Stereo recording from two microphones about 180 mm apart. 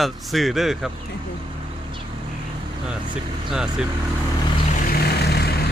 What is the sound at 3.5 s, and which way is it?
Speech, 5° right (ahead or behind).